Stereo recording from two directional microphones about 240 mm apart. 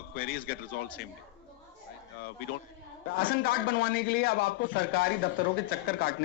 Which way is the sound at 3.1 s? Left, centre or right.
Left.